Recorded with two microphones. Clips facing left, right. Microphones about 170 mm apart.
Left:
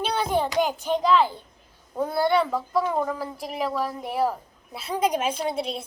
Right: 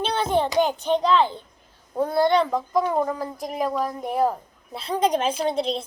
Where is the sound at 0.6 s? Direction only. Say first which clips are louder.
Right 2 dB; 5° left (ahead or behind).